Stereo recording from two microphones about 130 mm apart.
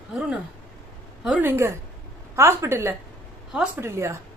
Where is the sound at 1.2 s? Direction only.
5° right (ahead or behind).